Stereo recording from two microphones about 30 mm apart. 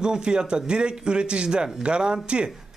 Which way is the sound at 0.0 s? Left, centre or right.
Right.